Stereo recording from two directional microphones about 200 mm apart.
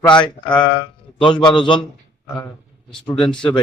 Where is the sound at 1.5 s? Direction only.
25° left (ahead or behind).